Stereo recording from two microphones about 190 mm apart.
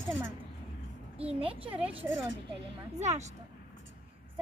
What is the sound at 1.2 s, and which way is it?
Speech, 30° right (ahead or behind).